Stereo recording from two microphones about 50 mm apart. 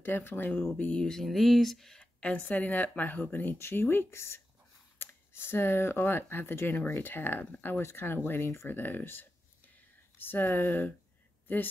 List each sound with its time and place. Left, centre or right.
0.0 s speech: left
1.0 s speech: centre
2.0 s a sound: left
2.4 s speech: left
4.1 s speech: left
4.9 s speech: left
8.6 s speech: left